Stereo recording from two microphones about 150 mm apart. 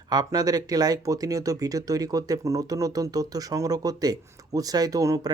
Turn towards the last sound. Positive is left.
turn(degrees=-25)  # may be behind; listen again after turning